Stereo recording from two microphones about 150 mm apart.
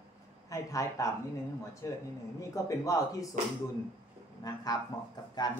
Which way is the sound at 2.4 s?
20° left (ahead or behind).